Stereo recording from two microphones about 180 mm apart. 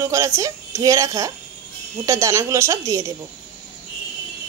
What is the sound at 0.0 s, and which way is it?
A woman's voice, 15° right (ahead or behind).